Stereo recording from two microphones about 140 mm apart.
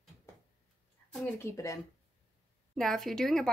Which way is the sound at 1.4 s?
20° left (ahead or behind).